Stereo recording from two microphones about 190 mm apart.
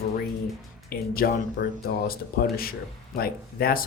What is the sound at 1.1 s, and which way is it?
Speech, 50° left (ahead or behind).